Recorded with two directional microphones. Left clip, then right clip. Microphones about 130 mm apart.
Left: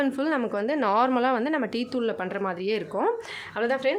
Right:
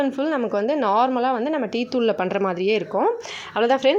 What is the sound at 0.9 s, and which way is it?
Speech, 5° left (ahead or behind).